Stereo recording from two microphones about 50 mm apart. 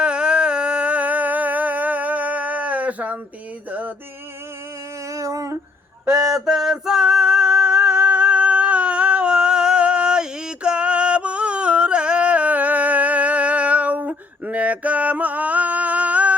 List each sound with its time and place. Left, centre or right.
0.0 s a sound: centre
3.7 s music: right
5.1 s humming: right
6.1 s male singing: centre; by 16.3 s right